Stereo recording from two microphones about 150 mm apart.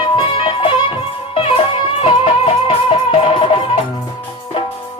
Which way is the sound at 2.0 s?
40° left (ahead or behind).